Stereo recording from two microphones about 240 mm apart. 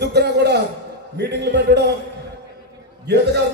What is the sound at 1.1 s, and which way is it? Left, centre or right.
Speech, right.